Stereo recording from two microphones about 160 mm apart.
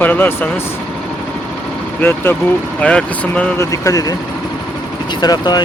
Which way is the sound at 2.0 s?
15° left (ahead or behind).